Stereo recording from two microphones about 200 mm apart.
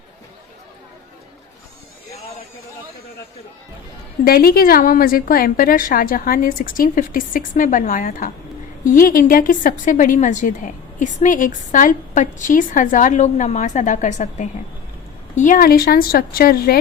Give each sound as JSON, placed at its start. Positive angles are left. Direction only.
{"t": 4.2, "sound": "a woman's voice", "side_deg": 50}